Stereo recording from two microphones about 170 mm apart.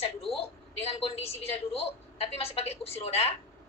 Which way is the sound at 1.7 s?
35° left (ahead or behind).